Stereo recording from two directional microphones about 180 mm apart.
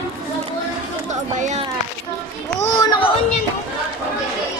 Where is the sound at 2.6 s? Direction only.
20° left (ahead or behind).